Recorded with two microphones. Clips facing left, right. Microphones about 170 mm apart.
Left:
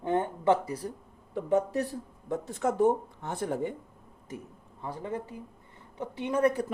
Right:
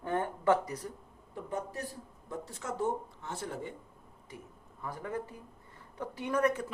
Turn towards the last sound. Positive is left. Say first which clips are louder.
# left 4 dB
turn(degrees=30)  # may be behind; listen again after turning